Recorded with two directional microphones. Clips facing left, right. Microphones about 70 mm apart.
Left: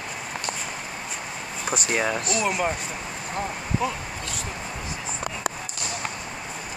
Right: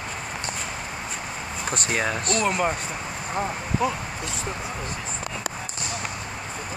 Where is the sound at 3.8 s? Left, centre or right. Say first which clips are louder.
Right 3 dB; centre.